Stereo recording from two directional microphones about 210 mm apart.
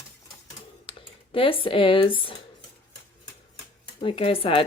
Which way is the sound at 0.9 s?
25° left (ahead or behind).